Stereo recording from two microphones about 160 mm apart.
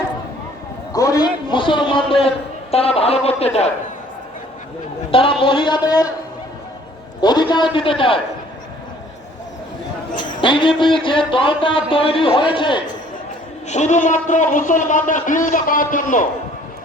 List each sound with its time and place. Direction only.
0.9 s a sound: 20° left (ahead or behind)
2.7 s speech: 40° left (ahead or behind)
5.1 s speech: 35° left (ahead or behind)
7.2 s speech: 25° left (ahead or behind)
10.4 s speech: 30° left (ahead or behind)
13.7 s a man's voice: 45° left (ahead or behind)